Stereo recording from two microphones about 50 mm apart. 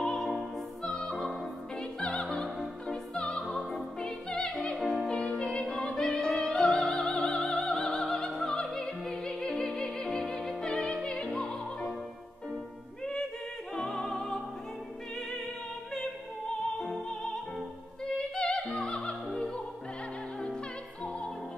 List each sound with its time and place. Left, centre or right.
0.0 s music: centre
4.6 s music: centre
5.0 s opera: centre
7.1 s opera: centre
7.5 s opera: centre
10.6 s music: centre
13.7 s music: centre
16.7 s music: centre
18.1 s opera: centre